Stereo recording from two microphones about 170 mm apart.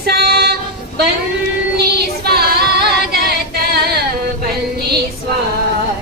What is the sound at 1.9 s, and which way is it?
Female singing, 70° right (ahead or behind).